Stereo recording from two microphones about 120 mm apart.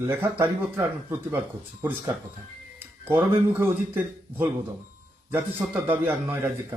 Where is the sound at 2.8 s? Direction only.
15° right (ahead or behind).